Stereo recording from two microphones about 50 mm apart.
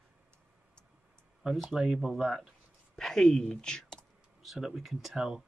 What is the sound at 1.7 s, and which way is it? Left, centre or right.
Speech, centre.